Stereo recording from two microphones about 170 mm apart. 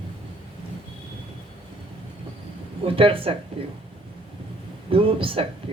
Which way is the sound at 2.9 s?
30° right (ahead or behind).